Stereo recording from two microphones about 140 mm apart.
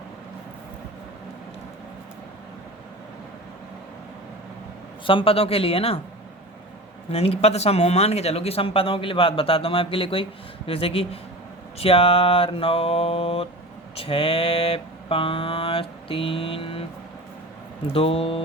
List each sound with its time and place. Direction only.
5.0 s mantra: 40° left (ahead or behind)
7.1 s speech: 45° left (ahead or behind)
10.7 s mantra: 45° left (ahead or behind)
13.9 s speech: 40° left (ahead or behind)
17.9 s mantra: 45° left (ahead or behind)